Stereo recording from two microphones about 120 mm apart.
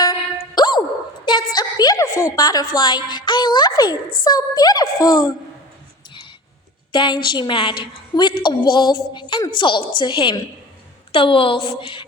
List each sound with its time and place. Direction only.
0.0 s a sound: 35° left (ahead or behind)
1.2 s a woman's voice: 40° left (ahead or behind)
6.9 s a woman's voice: 40° left (ahead or behind)